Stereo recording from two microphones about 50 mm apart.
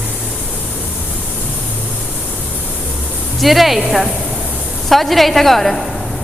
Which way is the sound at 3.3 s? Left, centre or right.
Centre.